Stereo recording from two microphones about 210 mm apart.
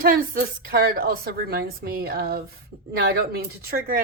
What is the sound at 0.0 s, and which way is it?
A woman's voice, 45° right (ahead or behind).